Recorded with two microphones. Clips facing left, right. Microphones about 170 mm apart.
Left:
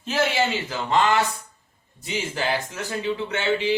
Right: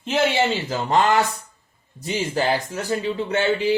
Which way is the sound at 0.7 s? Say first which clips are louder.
Right 2 dB; 45° right (ahead or behind).